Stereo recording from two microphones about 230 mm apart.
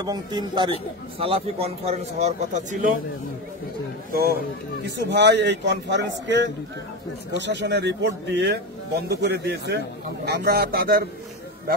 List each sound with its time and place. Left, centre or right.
0.0 s speech: centre
4.8 s a man's voice: right